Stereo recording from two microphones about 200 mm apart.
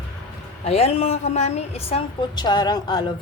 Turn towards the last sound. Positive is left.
turn(degrees=20)  # may be behind; listen again after turning